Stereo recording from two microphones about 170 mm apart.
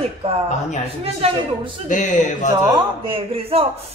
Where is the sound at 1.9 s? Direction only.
45° left (ahead or behind).